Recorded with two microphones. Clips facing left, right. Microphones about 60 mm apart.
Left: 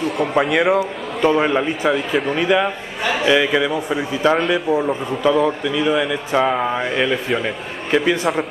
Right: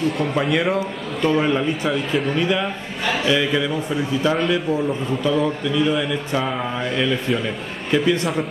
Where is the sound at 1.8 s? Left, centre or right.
Centre.